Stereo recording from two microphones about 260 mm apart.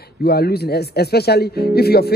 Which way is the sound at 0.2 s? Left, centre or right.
Left.